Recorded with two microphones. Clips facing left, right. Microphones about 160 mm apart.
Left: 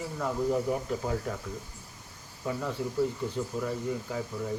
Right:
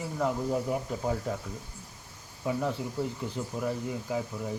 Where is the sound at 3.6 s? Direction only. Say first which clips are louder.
Even; 15° right (ahead or behind).